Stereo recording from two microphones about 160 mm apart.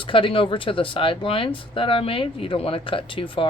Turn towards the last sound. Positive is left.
turn(degrees=35)  # may be behind; listen again after turning